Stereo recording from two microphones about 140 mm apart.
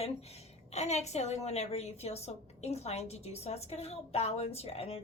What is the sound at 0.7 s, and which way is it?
A woman's voice, 50° left (ahead or behind).